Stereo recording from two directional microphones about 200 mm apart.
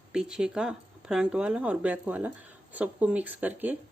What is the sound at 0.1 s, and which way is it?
Speech, 5° right (ahead or behind).